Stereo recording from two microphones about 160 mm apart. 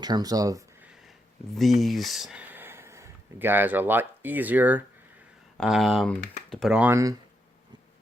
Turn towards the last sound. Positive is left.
turn(degrees=-15)  # may be behind; listen again after turning